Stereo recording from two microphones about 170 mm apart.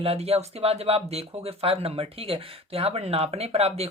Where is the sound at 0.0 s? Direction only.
35° right (ahead or behind).